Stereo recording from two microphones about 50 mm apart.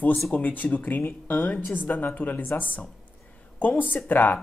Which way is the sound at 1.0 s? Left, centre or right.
Left.